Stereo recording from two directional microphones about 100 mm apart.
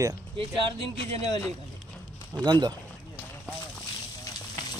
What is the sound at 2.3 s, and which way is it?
Speech, 45° right (ahead or behind).